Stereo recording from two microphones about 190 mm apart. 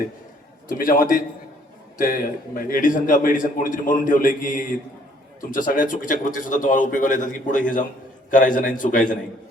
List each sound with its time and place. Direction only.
0.7 s a man's voice: 45° left (ahead or behind)